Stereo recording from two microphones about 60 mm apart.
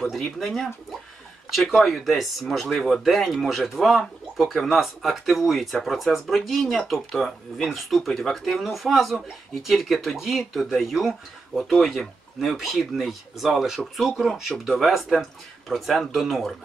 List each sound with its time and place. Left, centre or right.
0.0 s speech: centre